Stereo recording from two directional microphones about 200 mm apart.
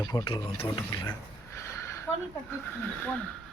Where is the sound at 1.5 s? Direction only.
15° left (ahead or behind).